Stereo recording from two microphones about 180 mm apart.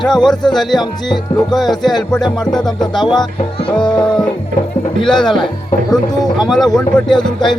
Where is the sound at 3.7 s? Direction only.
5° left (ahead or behind).